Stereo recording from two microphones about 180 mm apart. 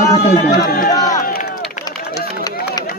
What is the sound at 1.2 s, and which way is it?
Run, 50° left (ahead or behind).